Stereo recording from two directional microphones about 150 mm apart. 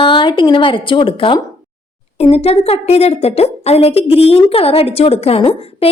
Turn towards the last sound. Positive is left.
turn(degrees=40)  # may be behind; listen again after turning